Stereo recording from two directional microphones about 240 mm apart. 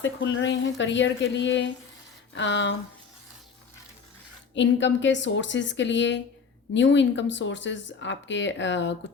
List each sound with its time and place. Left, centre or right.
0.0 s speech: left
4.5 s speech: left